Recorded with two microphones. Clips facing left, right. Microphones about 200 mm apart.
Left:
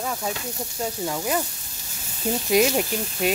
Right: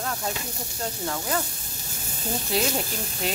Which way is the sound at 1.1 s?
15° left (ahead or behind).